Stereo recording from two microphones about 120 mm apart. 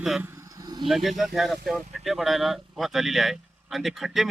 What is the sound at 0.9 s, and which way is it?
Speech, centre (ahead or behind).